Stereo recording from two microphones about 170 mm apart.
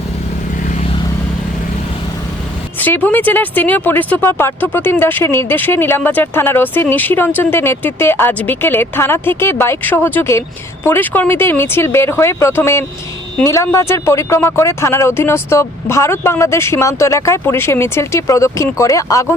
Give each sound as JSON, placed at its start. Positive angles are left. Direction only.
{"t": 2.8, "sound": "speech", "side_deg": 10}